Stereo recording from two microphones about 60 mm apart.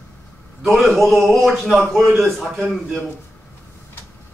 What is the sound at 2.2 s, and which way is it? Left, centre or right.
Speech, centre.